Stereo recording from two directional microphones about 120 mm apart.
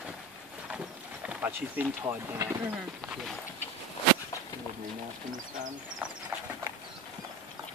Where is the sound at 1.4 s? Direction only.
15° right (ahead or behind).